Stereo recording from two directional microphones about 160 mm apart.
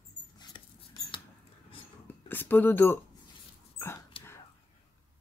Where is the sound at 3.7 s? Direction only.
15° left (ahead or behind).